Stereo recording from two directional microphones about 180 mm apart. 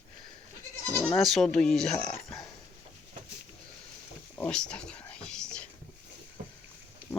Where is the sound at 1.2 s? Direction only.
Centre (ahead or behind).